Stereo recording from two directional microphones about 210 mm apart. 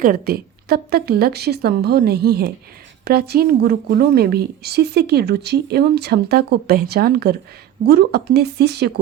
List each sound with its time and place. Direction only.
0.0 s a woman's voice: 45° right (ahead or behind)